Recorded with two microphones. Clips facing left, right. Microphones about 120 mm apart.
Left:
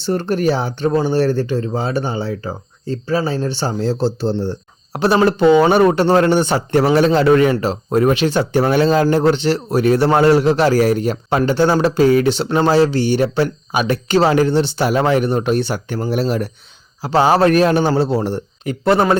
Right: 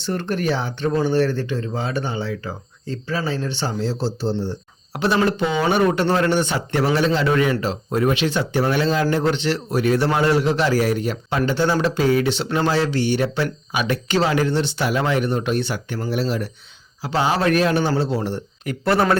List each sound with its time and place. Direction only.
0.0 s speech: 35° left (ahead or behind); by 4.5 s 65° left (ahead or behind)
4.9 s speech: 40° left (ahead or behind)
18.6 s speech: 25° left (ahead or behind)